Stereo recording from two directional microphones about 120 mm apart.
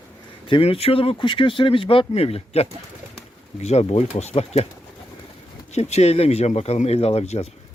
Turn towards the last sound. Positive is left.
turn(degrees=65)  # may be behind; listen again after turning